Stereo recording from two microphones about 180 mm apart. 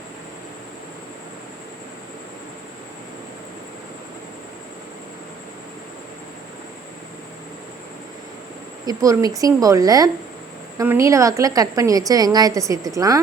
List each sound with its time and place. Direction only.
8.9 s a woman's voice: 20° right (ahead or behind)